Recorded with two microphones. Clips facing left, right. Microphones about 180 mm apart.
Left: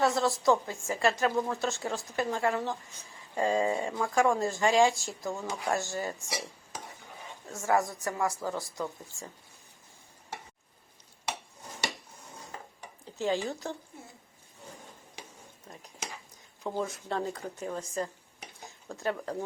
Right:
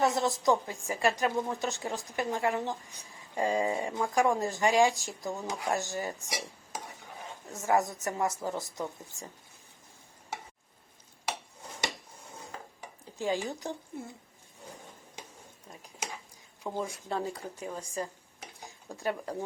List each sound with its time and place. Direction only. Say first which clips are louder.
0.0 s speech: left 1 dB; 20° right (ahead or behind)
7.4 s a woman's voice: even; 20° right (ahead or behind)
13.1 s speech: left 1 dB; 15° right (ahead or behind)
16.7 s speech: left 1 dB; 10° right (ahead or behind)